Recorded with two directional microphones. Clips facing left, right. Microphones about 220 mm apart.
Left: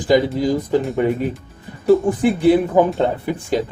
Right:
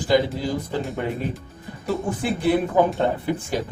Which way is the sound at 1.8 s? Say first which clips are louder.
Left 10 dB; 15° left (ahead or behind).